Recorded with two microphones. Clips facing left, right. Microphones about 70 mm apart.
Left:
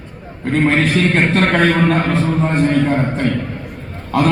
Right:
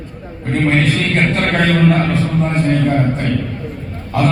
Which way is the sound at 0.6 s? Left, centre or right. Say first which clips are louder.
Left 1 dB; left.